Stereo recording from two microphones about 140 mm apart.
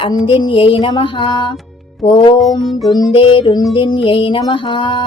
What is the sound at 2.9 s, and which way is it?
Mantra, 35° left (ahead or behind).